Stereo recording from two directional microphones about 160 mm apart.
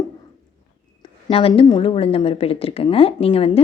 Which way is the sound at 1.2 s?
35° left (ahead or behind).